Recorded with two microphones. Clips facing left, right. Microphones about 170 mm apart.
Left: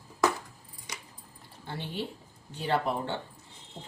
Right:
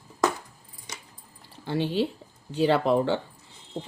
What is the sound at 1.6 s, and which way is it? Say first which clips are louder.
Speech: right 10 dB; 90° right.